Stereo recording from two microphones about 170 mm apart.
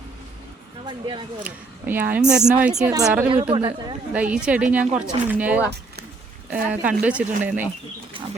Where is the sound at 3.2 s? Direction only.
30° right (ahead or behind).